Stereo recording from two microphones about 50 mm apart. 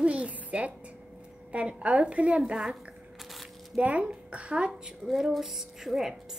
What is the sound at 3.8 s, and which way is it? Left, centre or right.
Speech, right.